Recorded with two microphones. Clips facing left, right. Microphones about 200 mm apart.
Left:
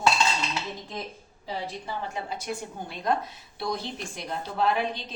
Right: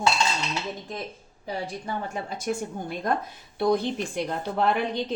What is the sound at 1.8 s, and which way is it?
A woman's voice, 45° right (ahead or behind).